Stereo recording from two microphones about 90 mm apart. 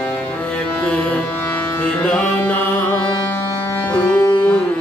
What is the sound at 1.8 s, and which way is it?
Music, 20° left (ahead or behind).